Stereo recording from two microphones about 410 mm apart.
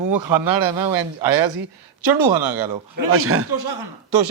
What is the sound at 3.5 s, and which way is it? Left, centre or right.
Speech, right.